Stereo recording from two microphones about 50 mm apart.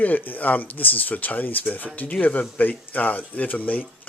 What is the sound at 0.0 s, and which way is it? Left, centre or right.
Speech, left.